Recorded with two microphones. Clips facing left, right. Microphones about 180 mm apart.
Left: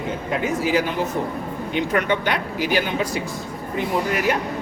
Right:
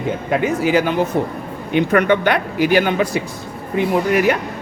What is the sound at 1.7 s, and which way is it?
A man's voice, 60° right (ahead or behind).